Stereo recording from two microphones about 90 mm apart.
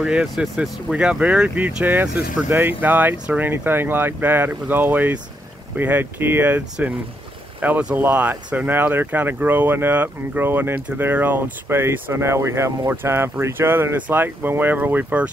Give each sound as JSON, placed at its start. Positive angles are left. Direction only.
{"t": 0.0, "sound": "speech", "side_deg": -10}
{"t": 1.9, "sound": "speech", "side_deg": -20}